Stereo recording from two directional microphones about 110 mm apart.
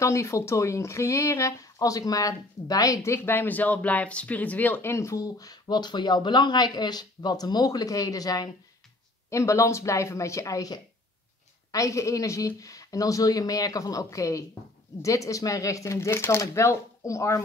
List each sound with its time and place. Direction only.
0.0 s speech: 25° left (ahead or behind)